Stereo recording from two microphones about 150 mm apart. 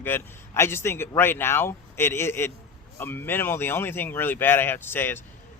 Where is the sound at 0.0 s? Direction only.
15° left (ahead or behind).